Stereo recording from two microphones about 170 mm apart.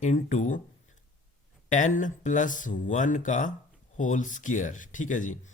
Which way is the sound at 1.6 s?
45° left (ahead or behind).